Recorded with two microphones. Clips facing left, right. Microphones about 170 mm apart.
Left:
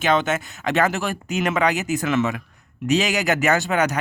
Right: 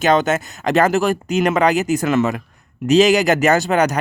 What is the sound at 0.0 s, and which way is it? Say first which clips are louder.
Speech: right 5 dB; 40° right (ahead or behind).